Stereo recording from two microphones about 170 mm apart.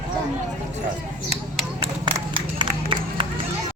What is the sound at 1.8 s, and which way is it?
Crowd, 30° right (ahead or behind).